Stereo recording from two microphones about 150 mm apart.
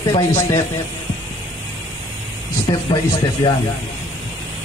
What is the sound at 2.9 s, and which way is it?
Speech, 25° left (ahead or behind).